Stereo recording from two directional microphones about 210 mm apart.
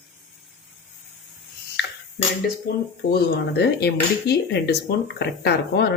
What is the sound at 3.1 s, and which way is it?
Speech, 50° left (ahead or behind).